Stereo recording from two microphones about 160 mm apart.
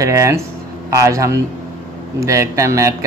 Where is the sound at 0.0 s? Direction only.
20° right (ahead or behind).